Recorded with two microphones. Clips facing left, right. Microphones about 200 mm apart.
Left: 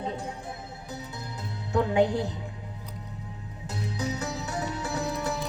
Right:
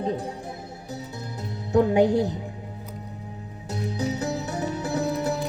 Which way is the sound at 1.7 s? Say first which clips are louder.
Right 5 dB; 45° right (ahead or behind).